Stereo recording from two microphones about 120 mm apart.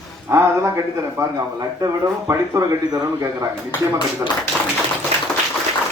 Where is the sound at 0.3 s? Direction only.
25° right (ahead or behind).